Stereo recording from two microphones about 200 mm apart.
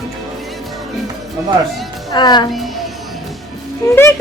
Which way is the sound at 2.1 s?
20° left (ahead or behind).